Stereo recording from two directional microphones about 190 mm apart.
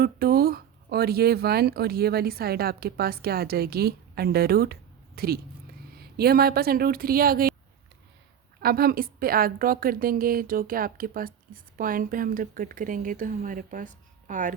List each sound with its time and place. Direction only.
0.0 s a woman's voice: 50° right (ahead or behind)
8.6 s a woman's voice: 50° right (ahead or behind)